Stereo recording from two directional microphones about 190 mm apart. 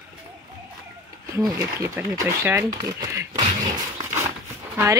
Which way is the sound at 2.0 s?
10° right (ahead or behind).